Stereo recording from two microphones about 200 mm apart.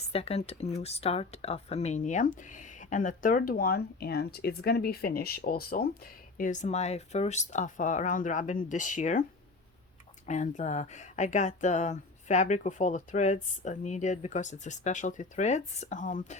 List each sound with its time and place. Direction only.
0.1 s speech: 30° left (ahead or behind)
10.2 s speech: 35° left (ahead or behind)